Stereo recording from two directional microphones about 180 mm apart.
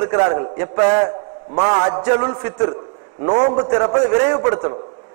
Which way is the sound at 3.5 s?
30° right (ahead or behind).